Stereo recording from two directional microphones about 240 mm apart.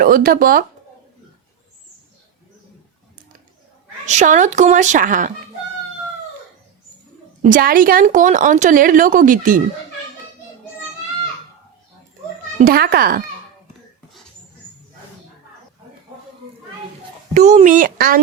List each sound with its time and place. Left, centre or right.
0.0 s a woman's voice: right
4.0 s a woman's voice: right
7.4 s a woman's voice: right
12.5 s a woman's voice: right
17.3 s a woman's voice: right